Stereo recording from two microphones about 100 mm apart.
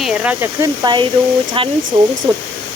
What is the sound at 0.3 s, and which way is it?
Speech, 25° right (ahead or behind).